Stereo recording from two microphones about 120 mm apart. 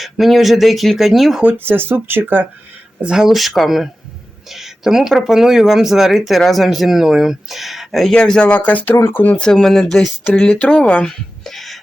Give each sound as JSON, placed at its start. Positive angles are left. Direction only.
{"t": 0.0, "sound": "speech", "side_deg": 0}
{"t": 1.5, "sound": "speech", "side_deg": -20}
{"t": 3.0, "sound": "speech", "side_deg": -5}